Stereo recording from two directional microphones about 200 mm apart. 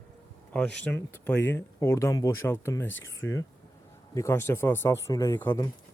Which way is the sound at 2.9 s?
75° left (ahead or behind).